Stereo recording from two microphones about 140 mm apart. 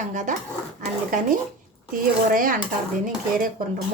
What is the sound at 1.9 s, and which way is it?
A woman's voice, 80° right.